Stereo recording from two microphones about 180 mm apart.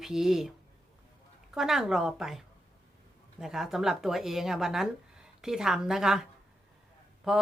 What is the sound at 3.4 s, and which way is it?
Speech, centre (ahead or behind).